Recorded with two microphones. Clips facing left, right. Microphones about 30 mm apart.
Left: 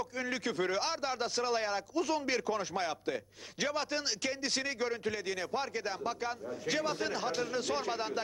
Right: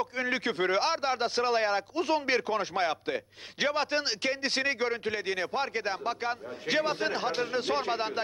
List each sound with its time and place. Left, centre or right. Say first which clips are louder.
0.0 s a man's voice: right 6 dB; right